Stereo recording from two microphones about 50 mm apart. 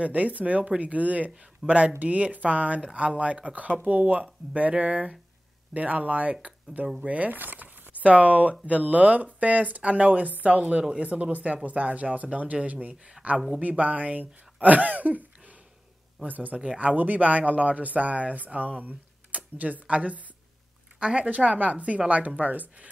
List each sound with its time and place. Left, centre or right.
0.0 s speech: right
16.5 s speech: right